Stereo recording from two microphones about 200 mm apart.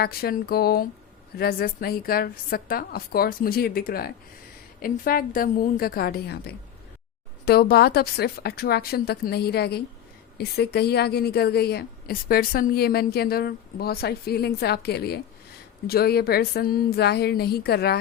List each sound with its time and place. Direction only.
0.0 s a woman's voice: 50° left (ahead or behind)